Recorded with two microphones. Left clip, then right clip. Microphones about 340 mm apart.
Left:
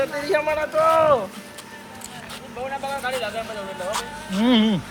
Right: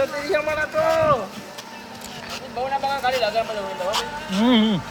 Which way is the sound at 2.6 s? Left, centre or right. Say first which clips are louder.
Right 5 dB; right.